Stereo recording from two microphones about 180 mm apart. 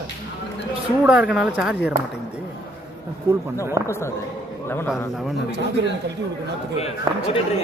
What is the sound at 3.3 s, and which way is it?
Speech, 15° right (ahead or behind).